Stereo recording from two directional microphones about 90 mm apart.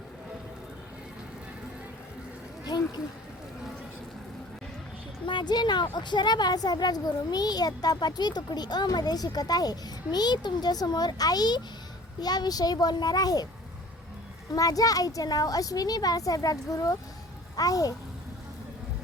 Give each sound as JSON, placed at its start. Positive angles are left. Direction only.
{"t": 2.6, "sound": "a sound", "side_deg": 50}
{"t": 5.2, "sound": "a woman's voice", "side_deg": 60}
{"t": 14.5, "sound": "a woman's voice", "side_deg": 40}